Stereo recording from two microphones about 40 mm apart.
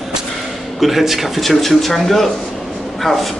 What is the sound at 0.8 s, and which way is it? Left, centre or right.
A man's voice, centre.